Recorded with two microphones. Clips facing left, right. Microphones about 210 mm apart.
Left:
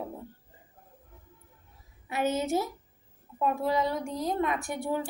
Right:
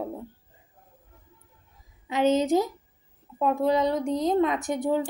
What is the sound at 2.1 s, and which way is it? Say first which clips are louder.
A woman's voice: right 6 dB; 20° right (ahead or behind).